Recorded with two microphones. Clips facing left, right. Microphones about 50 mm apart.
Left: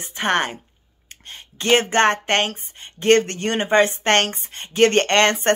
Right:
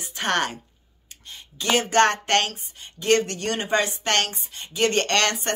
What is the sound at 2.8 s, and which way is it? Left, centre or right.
Speech, left.